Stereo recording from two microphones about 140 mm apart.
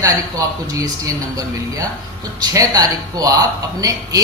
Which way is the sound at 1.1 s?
25° right (ahead or behind).